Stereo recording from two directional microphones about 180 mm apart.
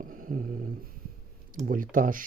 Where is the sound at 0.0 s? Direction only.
50° right (ahead or behind).